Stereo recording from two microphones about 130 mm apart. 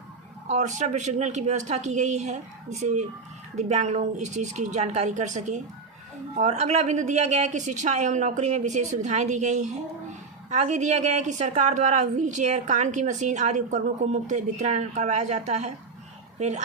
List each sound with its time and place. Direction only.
0.5 s a woman's voice: 65° right (ahead or behind)